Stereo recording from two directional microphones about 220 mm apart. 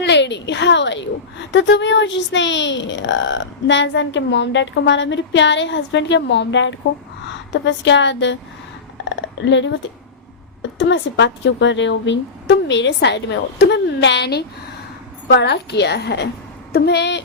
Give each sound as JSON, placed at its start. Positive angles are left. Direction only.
{"t": 0.0, "sound": "a woman's voice", "side_deg": 50}